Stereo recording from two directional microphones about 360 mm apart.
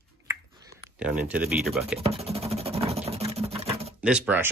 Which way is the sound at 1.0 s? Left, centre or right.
Centre.